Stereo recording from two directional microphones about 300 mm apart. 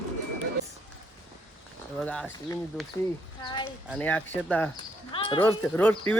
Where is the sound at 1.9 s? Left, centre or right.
Centre.